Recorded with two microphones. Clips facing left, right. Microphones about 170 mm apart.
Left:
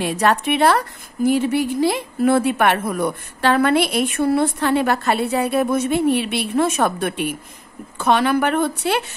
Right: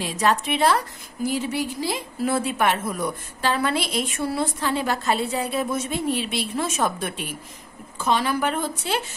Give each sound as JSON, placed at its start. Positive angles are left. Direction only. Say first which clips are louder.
{"t": 0.0, "sound": "a woman's voice", "louder": "left 4 dB", "side_deg": 60}